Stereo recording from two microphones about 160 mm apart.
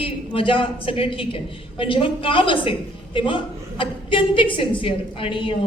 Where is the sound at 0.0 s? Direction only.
35° left (ahead or behind).